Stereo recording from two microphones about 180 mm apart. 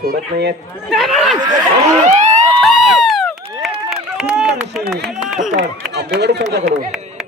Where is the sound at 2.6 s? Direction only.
Centre (ahead or behind).